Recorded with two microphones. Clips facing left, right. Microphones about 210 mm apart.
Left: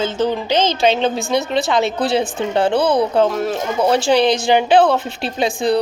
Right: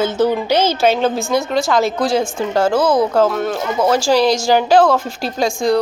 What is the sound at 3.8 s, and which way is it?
Speech, 20° left (ahead or behind).